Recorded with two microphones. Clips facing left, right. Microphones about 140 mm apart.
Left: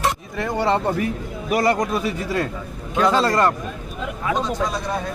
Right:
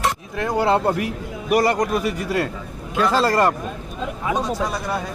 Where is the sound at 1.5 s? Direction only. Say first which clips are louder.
Right 1 dB; centre (ahead or behind).